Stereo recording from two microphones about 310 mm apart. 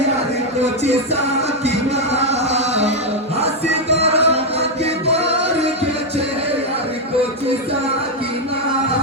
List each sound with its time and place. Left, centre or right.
0.6 s music: right